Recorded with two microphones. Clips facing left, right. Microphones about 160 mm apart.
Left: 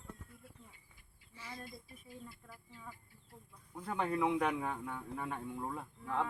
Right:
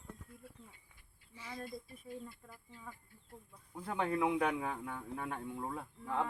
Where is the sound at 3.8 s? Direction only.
Centre (ahead or behind).